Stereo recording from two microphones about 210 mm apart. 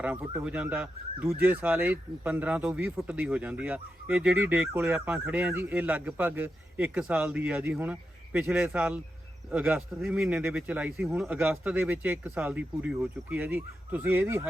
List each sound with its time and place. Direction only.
0.0 s speech: 10° right (ahead or behind)